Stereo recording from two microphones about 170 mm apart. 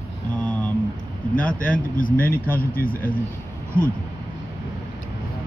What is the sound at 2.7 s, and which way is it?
Speech, 55° left (ahead or behind).